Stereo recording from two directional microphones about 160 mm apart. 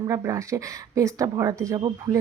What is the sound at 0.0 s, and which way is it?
Speech, 20° right (ahead or behind).